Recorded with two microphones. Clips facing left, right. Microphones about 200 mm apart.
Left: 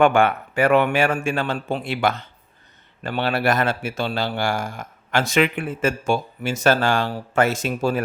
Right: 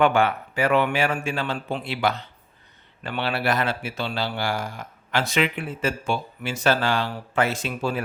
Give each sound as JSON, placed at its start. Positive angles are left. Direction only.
{"t": 0.0, "sound": "a man's voice", "side_deg": 50}